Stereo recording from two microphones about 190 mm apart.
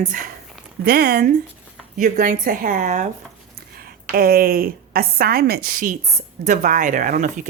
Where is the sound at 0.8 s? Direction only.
50° right (ahead or behind).